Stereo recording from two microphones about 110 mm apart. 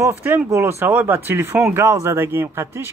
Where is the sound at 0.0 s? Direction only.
20° right (ahead or behind).